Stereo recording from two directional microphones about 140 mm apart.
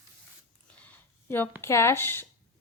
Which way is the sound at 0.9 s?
15° left (ahead or behind).